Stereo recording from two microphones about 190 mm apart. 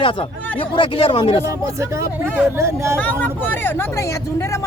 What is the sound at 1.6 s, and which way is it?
Speech, 15° right (ahead or behind).